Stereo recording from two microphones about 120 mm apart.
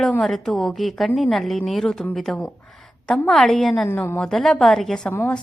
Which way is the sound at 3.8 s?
20° left (ahead or behind).